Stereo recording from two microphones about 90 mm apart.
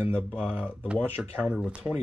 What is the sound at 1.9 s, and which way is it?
Speech, 60° left (ahead or behind).